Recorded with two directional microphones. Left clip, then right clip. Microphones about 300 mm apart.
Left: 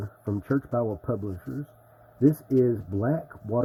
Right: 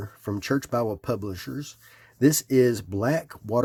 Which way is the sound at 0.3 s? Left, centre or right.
Right.